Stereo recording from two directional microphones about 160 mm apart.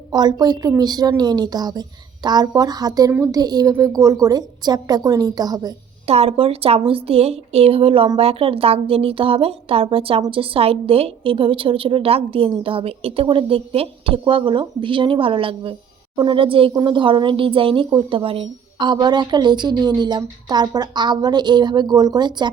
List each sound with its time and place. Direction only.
0.1 s a woman's voice: 25° right (ahead or behind)
6.1 s a woman's voice: 40° right (ahead or behind)